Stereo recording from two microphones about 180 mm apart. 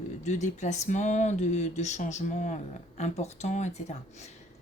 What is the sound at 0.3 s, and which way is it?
Speech, 40° left (ahead or behind).